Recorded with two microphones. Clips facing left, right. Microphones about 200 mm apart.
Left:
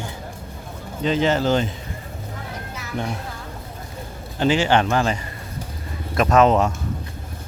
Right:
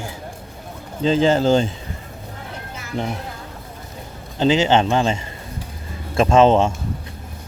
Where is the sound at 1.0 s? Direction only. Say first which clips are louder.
Right 3 dB; 30° right (ahead or behind).